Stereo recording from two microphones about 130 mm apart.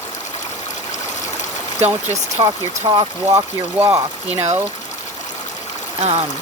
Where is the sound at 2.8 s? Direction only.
30° right (ahead or behind).